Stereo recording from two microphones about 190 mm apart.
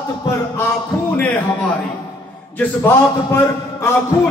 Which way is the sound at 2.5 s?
15° left (ahead or behind).